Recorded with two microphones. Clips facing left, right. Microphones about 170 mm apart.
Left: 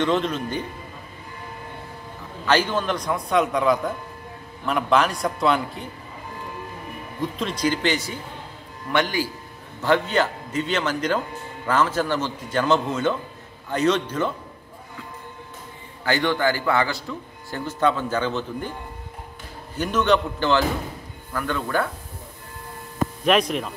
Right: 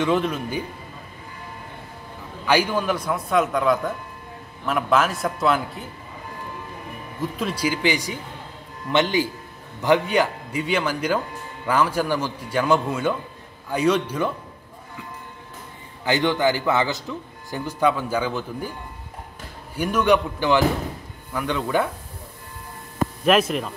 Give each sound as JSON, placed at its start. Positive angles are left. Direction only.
{"t": 0.0, "sound": "a man's voice", "side_deg": -10}
{"t": 2.4, "sound": "a man's voice", "side_deg": -10}
{"t": 7.2, "sound": "a man's voice", "side_deg": -5}
{"t": 16.0, "sound": "a man's voice", "side_deg": -20}
{"t": 19.7, "sound": "a man's voice", "side_deg": -10}
{"t": 23.2, "sound": "a man's voice", "side_deg": 0}